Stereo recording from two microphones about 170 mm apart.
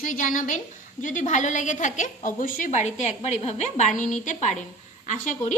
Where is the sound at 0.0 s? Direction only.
50° left (ahead or behind).